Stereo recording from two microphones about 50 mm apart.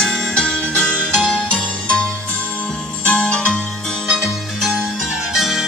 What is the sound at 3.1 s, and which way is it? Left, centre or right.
Music, left.